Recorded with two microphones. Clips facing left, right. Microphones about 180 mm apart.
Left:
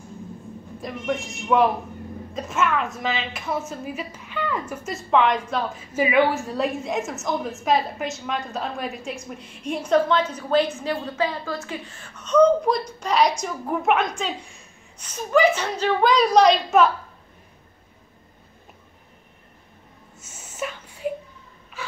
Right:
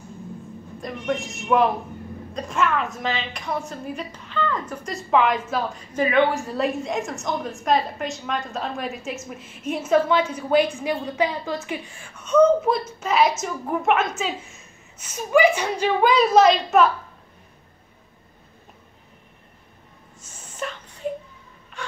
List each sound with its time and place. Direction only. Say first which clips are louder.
0.7 s a woman's voice: right 1 dB; centre (ahead or behind)
20.4 s a sound: left 1 dB; 5° left (ahead or behind)
21.8 s snort: right 1 dB; 5° left (ahead or behind)